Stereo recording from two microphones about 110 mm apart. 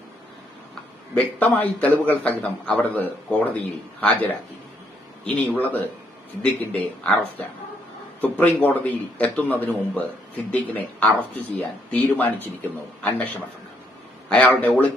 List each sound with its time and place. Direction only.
1.1 s a man's voice: 15° left (ahead or behind)
5.2 s a man's voice: 15° left (ahead or behind)
8.2 s a man's voice: 15° left (ahead or behind)